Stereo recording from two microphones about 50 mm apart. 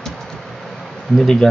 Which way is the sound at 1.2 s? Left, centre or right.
Centre.